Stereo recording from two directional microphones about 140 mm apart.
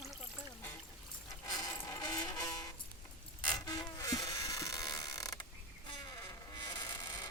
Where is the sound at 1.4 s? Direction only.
25° left (ahead or behind).